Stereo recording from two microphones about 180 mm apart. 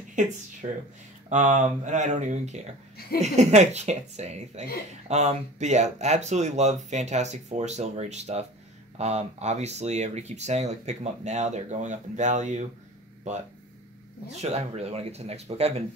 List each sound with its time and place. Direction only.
0.1 s speech: 45° right (ahead or behind)
14.3 s speech: 35° right (ahead or behind)